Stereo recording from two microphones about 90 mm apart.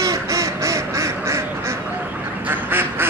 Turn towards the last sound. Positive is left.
turn(degrees=-25)  # may be behind; listen again after turning